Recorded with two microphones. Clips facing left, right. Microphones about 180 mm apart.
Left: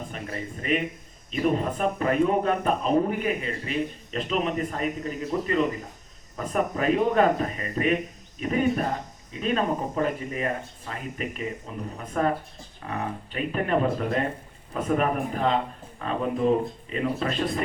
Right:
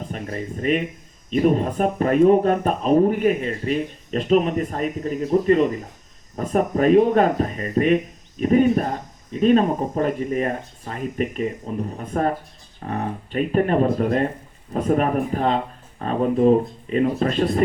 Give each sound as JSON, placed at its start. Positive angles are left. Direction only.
{"t": 0.1, "sound": "speech", "side_deg": -40}